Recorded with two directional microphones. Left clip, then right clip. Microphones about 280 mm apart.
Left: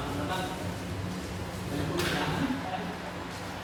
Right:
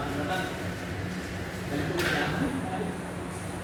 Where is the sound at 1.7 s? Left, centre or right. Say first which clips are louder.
Right 3 dB; centre.